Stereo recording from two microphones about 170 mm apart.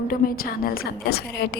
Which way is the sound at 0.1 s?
60° left (ahead or behind).